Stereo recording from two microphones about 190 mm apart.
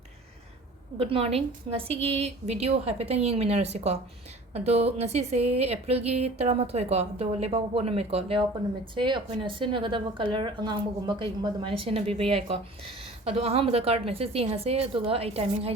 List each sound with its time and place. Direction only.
0.9 s speech: 30° right (ahead or behind)